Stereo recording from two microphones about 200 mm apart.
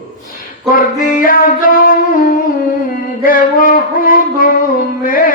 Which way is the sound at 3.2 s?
45° left (ahead or behind).